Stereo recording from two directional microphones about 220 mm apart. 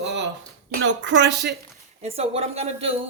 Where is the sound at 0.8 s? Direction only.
55° right (ahead or behind).